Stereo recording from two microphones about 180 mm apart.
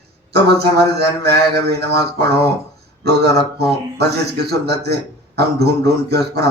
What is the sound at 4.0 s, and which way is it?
A man's voice, 65° right (ahead or behind).